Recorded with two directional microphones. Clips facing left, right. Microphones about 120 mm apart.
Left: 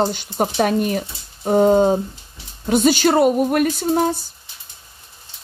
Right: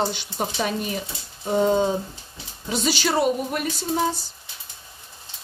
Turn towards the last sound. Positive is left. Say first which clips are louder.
# left 6 dB
turn(degrees=50)  # may be behind; listen again after turning